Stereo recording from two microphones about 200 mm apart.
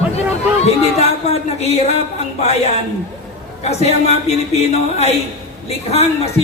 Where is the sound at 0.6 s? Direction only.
30° left (ahead or behind).